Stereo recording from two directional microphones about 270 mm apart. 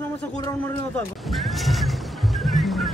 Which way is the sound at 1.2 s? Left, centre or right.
Centre.